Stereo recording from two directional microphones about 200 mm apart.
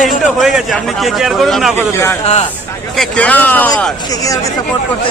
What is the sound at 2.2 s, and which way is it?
Speech, 30° left (ahead or behind).